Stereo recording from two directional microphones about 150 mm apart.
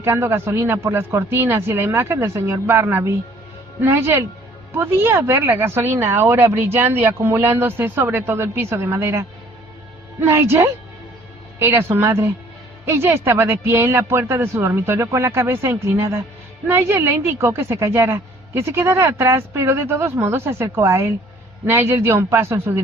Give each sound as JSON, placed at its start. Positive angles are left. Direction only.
{"t": 0.0, "sound": "speech", "side_deg": -15}